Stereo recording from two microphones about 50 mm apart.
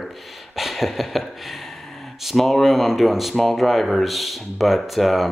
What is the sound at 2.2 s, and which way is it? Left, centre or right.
Speech, centre.